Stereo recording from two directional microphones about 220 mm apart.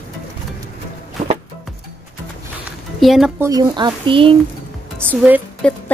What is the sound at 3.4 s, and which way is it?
Speech, 20° right (ahead or behind).